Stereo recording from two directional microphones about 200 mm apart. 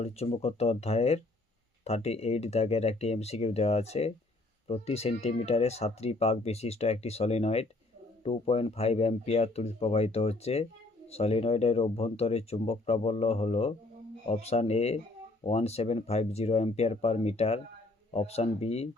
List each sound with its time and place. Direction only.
0.0 s speech: 30° left (ahead or behind)